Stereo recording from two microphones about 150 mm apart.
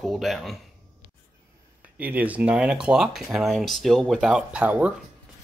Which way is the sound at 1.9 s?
10° right (ahead or behind).